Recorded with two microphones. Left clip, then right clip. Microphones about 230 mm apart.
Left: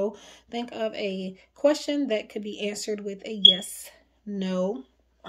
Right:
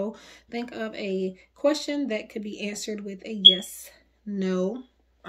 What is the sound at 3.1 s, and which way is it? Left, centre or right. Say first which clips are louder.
Speech: right 2 dB; left.